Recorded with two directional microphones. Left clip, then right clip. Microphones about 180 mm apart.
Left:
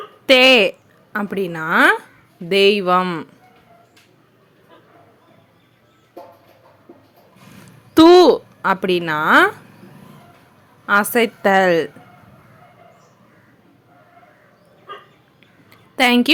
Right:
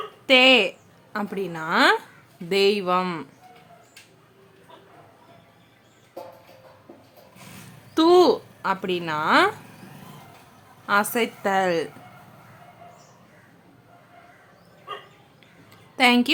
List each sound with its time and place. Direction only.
0.3 s a woman's voice: 30° left (ahead or behind)
7.9 s a woman's voice: 35° left (ahead or behind)
10.8 s a woman's voice: 25° left (ahead or behind)
15.7 s a sound: 30° left (ahead or behind)